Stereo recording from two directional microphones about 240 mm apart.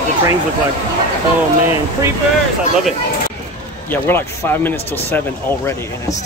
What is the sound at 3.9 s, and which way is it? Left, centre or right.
Speech, centre.